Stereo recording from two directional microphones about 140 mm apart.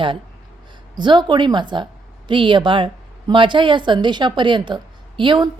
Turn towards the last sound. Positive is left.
turn(degrees=-35)  # may be behind; listen again after turning